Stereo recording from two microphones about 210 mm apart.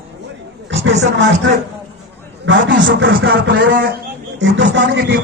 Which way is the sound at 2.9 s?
60° right (ahead or behind).